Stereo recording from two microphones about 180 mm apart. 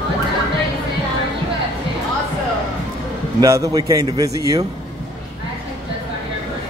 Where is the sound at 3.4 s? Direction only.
20° right (ahead or behind).